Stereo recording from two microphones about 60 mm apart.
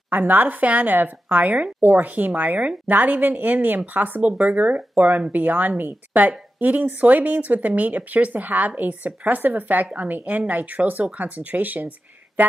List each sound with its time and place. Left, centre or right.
0.1 s speech: right